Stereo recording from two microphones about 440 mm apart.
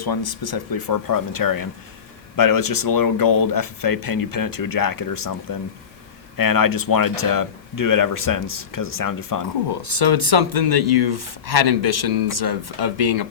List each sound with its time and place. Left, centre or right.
0.0 s speech: left
10.3 s speech: right